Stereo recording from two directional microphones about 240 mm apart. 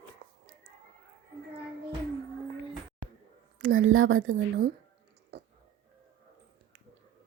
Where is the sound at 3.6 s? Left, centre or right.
Right.